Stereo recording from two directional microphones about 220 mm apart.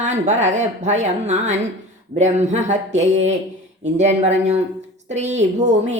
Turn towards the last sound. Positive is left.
turn(degrees=-30)  # may be behind; listen again after turning